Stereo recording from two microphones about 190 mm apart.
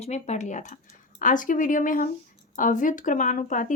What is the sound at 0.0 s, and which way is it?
A woman's voice, 35° left (ahead or behind).